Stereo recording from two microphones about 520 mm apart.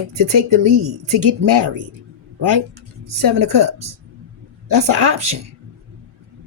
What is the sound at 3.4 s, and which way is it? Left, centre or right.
Speech, right.